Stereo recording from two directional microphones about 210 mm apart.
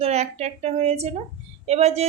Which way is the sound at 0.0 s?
30° right (ahead or behind).